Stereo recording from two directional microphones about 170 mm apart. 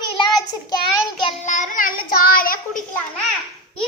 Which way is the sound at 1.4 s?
45° left (ahead or behind).